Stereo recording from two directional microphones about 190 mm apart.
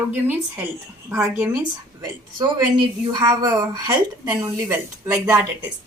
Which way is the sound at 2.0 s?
20° right (ahead or behind).